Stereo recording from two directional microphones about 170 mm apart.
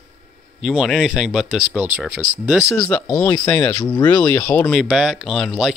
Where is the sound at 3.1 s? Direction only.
15° left (ahead or behind).